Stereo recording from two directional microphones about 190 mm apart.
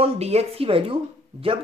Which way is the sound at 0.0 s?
35° right (ahead or behind).